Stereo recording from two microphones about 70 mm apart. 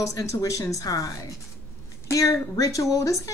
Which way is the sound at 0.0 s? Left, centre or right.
Left.